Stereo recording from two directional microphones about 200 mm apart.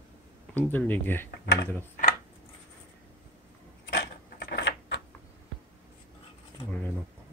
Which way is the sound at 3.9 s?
55° left (ahead or behind).